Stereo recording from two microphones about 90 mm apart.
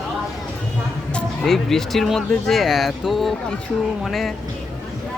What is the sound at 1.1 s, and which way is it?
Speech, 5° left (ahead or behind).